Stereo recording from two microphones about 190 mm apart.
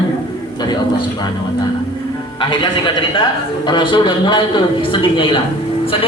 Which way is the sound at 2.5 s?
25° left (ahead or behind).